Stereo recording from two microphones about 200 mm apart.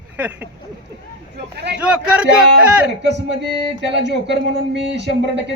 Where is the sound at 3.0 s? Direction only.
60° right (ahead or behind).